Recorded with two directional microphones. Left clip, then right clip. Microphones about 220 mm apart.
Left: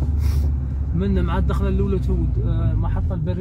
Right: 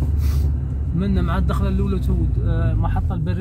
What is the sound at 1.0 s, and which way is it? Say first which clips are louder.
Speech: even; 15° right (ahead or behind).